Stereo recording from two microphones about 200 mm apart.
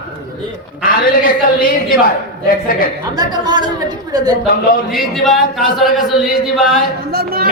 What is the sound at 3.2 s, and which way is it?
Speech, 20° right (ahead or behind).